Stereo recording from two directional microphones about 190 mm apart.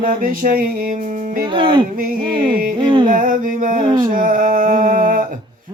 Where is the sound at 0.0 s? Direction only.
50° right (ahead or behind).